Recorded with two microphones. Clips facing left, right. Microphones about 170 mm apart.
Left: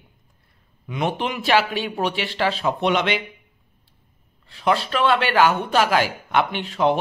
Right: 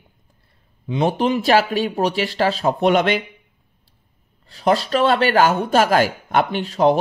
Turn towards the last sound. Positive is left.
turn(degrees=-40)  # may be behind; listen again after turning